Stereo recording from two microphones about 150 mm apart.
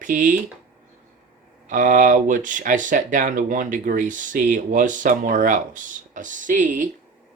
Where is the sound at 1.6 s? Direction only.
60° right (ahead or behind).